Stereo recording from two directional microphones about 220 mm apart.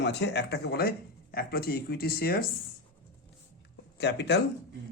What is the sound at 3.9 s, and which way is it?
Speech, 50° left (ahead or behind).